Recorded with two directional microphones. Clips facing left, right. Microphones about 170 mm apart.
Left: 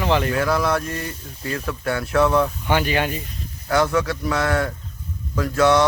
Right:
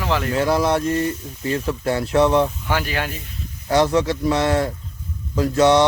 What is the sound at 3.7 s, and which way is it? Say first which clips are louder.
Speech: right 2 dB; 25° right (ahead or behind).